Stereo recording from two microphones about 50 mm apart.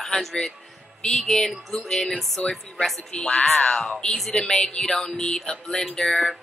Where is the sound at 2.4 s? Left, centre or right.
Left; by 4.4 s centre.